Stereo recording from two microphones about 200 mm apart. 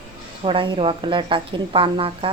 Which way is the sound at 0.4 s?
25° right (ahead or behind).